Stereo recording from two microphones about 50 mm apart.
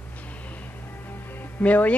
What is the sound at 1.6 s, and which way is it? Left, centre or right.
Speech, left.